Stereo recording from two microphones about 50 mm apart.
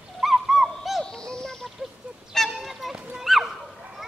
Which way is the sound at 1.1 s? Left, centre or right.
Centre.